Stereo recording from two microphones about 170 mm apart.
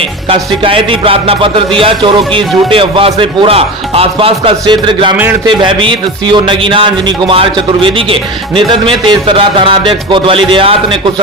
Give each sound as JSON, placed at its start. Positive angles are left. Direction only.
{"t": 0.3, "sound": "a man's voice", "side_deg": -30}
{"t": 5.1, "sound": "a man's voice", "side_deg": -10}
{"t": 5.5, "sound": "a man's voice", "side_deg": -30}